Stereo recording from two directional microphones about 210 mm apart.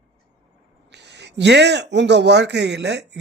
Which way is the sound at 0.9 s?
55° right (ahead or behind).